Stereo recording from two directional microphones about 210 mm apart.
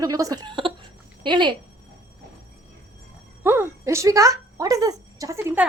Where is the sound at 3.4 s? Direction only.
10° right (ahead or behind).